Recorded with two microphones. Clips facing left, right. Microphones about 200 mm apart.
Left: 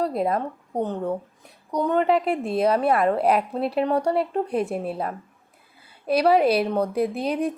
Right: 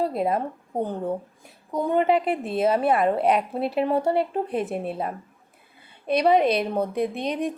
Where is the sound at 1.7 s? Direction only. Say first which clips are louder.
Even; 5° right (ahead or behind).